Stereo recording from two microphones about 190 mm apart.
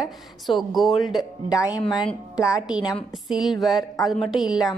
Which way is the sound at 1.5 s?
15° left (ahead or behind).